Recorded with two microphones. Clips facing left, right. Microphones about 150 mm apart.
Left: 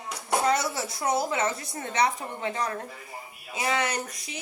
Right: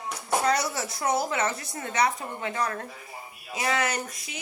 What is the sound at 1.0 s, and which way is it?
A woman's voice, 20° left (ahead or behind).